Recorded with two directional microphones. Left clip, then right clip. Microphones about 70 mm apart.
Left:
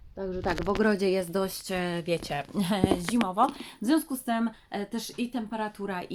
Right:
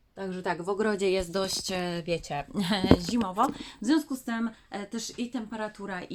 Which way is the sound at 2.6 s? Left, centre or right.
Left.